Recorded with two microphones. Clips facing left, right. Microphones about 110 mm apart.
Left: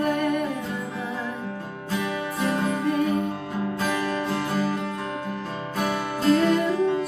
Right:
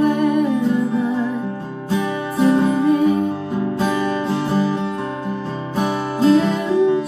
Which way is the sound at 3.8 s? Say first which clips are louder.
Right 5 dB; 25° right (ahead or behind).